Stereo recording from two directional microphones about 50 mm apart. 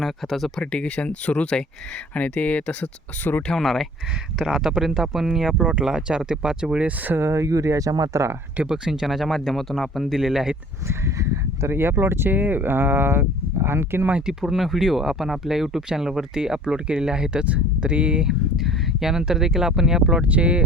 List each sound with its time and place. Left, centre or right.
0.0 s speech: centre
0.6 s speech: left
3.6 s speech: centre
4.4 s speech: centre
7.2 s speech: right
8.6 s speech: centre
10.8 s speech: right
11.7 s speech: right
12.3 s speech: right
14.3 s speech: centre; by 18.3 s right
18.3 s speech: centre
20.2 s speech: right